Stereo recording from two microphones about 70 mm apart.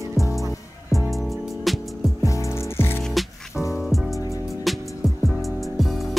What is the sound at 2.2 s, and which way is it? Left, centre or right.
Music, left.